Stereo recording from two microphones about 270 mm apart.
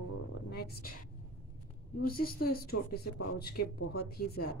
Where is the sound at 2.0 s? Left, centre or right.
Left.